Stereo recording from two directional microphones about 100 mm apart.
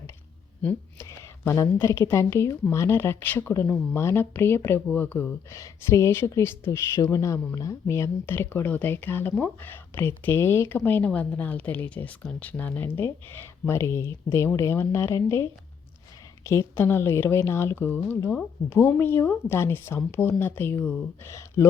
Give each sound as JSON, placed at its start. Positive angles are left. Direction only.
{"t": 0.6, "sound": "a woman's voice", "side_deg": 25}